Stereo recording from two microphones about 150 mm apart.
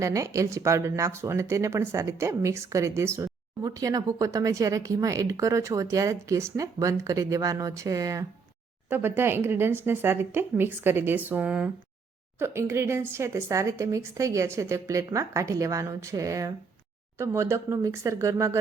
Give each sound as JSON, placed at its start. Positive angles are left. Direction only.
{"t": 0.0, "sound": "speech", "side_deg": -20}